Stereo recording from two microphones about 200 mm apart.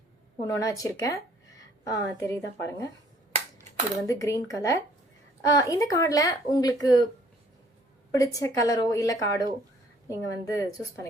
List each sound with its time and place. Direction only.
0.4 s speech: 15° left (ahead or behind)
4.0 s speech: 15° left (ahead or behind)
8.1 s speech: 15° left (ahead or behind)